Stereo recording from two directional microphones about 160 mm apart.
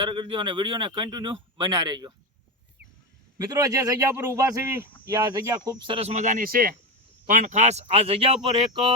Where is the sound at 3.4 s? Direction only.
25° right (ahead or behind).